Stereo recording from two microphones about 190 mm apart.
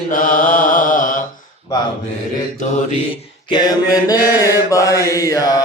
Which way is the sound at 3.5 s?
20° left (ahead or behind).